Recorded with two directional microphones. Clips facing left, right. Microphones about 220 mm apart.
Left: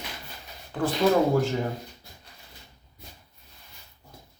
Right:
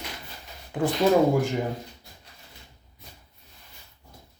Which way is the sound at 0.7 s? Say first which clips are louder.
Right 2 dB; 15° right (ahead or behind).